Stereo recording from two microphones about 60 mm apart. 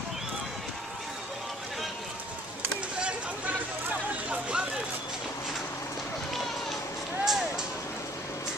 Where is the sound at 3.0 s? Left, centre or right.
Centre.